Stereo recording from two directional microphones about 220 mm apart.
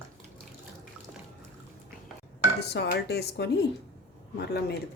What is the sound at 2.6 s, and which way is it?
Speech, 50° left (ahead or behind).